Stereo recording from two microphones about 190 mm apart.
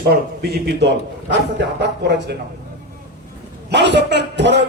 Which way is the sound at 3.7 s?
65° right (ahead or behind).